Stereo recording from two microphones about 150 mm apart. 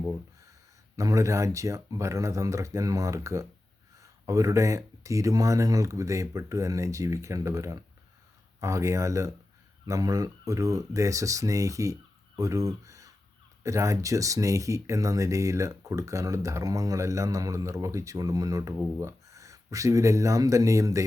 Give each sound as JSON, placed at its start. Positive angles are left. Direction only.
{"t": 0.9, "sound": "speech", "side_deg": -20}